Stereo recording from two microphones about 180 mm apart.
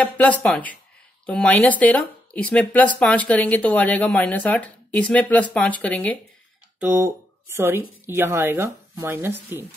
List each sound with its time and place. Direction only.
0.0 s speech: 5° left (ahead or behind)
6.8 s speech: 10° right (ahead or behind)